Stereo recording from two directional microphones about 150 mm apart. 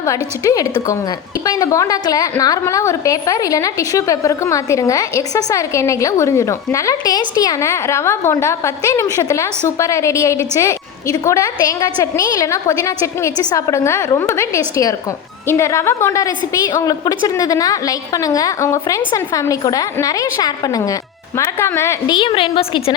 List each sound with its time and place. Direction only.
0.0 s a woman's voice: 20° left (ahead or behind)
22.1 s a woman's voice: 35° left (ahead or behind)